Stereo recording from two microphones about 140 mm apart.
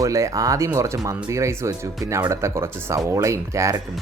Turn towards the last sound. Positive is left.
turn(degrees=-20)  # may be behind; listen again after turning